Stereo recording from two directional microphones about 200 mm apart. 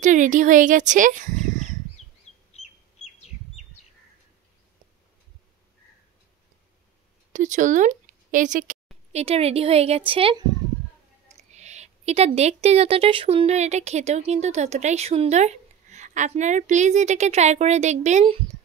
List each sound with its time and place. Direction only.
0.0 s speech: 40° right (ahead or behind)
2.5 s bird: 30° left (ahead or behind)
7.3 s speech: 40° right (ahead or behind)
11.5 s speech: 35° right (ahead or behind)